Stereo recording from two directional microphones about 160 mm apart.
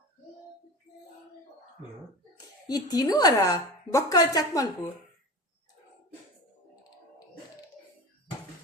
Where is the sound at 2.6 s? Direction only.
25° left (ahead or behind).